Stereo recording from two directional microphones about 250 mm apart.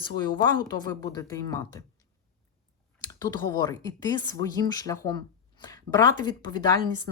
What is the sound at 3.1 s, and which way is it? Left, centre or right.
A woman's voice, centre.